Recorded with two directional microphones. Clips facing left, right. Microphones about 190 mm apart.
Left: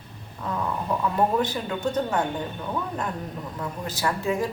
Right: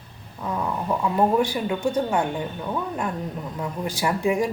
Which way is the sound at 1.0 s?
10° right (ahead or behind).